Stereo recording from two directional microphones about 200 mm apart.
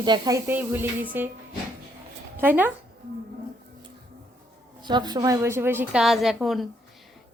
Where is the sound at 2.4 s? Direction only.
10° right (ahead or behind).